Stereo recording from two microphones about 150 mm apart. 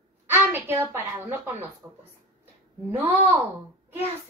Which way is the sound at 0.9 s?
15° right (ahead or behind).